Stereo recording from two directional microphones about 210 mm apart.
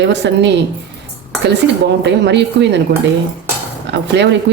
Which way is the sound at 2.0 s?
55° right (ahead or behind).